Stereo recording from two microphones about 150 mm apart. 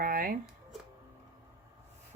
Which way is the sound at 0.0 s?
75° right (ahead or behind).